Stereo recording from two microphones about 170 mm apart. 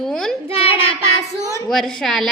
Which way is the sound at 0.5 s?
35° left (ahead or behind).